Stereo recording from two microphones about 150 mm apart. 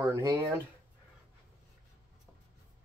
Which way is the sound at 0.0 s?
20° right (ahead or behind).